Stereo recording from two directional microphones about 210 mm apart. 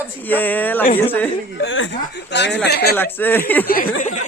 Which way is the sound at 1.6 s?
65° left (ahead or behind).